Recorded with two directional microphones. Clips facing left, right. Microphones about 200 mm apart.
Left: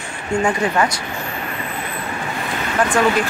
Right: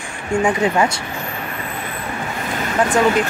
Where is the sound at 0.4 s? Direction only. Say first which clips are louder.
Right 2 dB; 15° right (ahead or behind).